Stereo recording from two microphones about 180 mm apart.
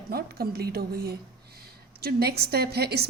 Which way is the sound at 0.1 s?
60° right (ahead or behind).